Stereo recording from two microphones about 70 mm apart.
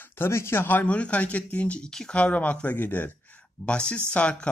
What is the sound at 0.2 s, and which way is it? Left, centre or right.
Speech, left.